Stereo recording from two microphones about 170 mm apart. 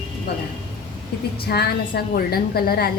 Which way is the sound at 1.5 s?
65° left (ahead or behind).